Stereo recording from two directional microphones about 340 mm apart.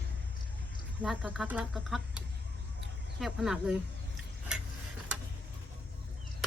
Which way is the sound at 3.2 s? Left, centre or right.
Centre.